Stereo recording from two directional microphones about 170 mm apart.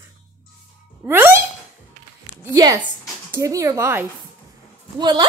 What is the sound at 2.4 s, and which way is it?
A woman's voice, 20° right (ahead or behind).